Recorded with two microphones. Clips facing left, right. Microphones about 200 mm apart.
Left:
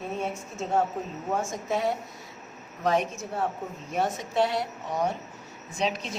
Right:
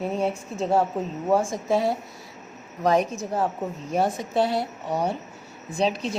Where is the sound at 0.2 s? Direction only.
35° right (ahead or behind).